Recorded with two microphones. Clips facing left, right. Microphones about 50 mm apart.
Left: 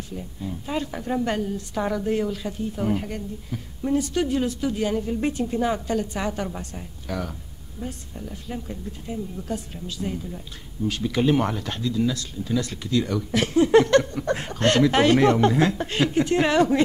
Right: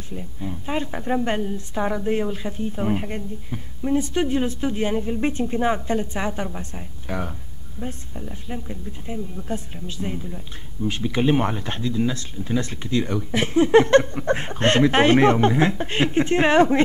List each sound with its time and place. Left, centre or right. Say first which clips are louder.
0.1 s speech: right 5 dB; right